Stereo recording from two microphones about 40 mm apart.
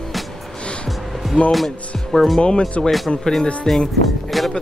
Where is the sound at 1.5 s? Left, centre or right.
Centre.